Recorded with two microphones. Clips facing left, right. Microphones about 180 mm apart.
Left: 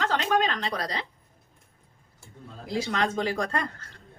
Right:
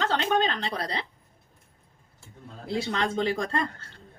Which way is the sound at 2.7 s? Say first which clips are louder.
Even; 30° right (ahead or behind).